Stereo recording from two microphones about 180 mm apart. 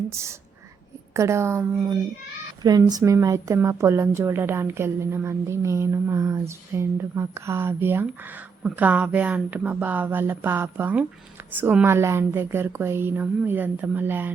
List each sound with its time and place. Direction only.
0.1 s a woman's voice: 15° right (ahead or behind)